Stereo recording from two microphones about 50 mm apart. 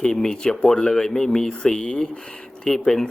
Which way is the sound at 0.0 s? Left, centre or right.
Centre.